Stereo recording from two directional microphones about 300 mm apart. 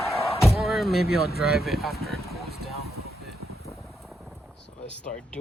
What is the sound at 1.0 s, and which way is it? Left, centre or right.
Speech, left.